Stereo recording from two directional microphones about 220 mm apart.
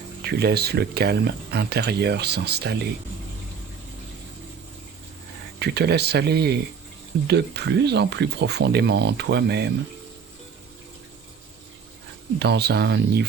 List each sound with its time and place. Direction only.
0.2 s speech: 45° right (ahead or behind)
5.5 s speech: 50° right (ahead or behind)
12.4 s speech: 50° right (ahead or behind)